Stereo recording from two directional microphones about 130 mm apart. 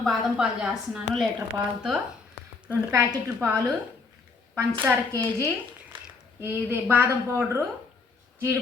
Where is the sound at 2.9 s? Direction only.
25° right (ahead or behind).